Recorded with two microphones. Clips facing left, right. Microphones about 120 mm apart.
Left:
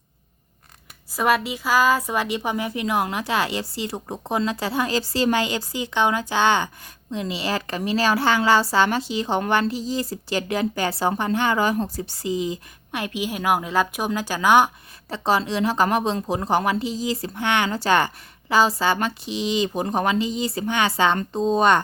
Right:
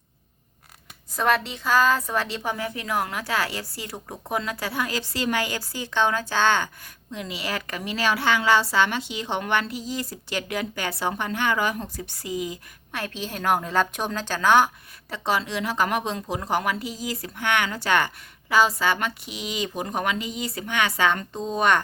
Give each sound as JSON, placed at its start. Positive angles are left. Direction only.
{"t": 1.1, "sound": "a woman's voice", "side_deg": 10}
{"t": 7.1, "sound": "a woman's voice", "side_deg": 30}
{"t": 13.0, "sound": "a woman's voice", "side_deg": 10}
{"t": 15.1, "sound": "a woman's voice", "side_deg": 30}